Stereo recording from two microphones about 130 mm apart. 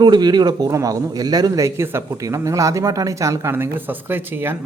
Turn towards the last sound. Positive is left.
turn(degrees=-15)  # may be behind; listen again after turning